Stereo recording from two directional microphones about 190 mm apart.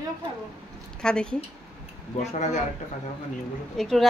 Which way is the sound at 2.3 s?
35° left (ahead or behind).